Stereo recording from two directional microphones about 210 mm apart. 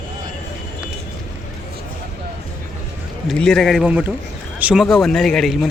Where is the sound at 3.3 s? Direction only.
Centre (ahead or behind).